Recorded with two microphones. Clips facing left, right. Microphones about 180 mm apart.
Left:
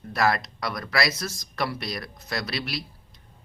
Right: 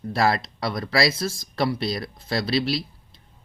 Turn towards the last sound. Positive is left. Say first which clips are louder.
# right 8 dB
turn(degrees=-30)  # may be behind; listen again after turning